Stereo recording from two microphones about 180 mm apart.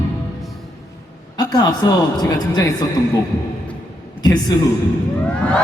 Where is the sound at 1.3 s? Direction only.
20° left (ahead or behind).